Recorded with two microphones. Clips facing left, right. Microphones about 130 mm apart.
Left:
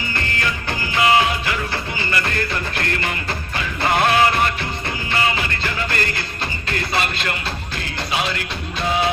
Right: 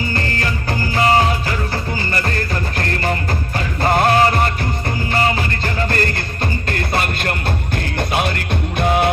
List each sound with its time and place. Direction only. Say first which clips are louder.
0.1 s music: right 3 dB; 35° right (ahead or behind); by 9.0 s 55° right (ahead or behind)